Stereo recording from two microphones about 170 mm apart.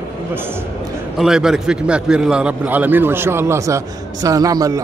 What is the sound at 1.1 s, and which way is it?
A man's voice, centre (ahead or behind).